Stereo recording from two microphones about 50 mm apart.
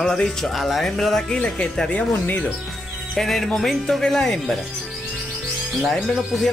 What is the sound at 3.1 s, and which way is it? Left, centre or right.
Speech, centre.